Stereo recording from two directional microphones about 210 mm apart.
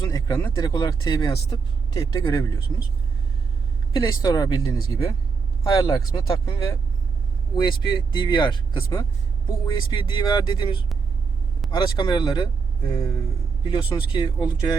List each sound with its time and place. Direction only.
0.0 s speech: 20° left (ahead or behind)
3.9 s speech: 15° left (ahead or behind)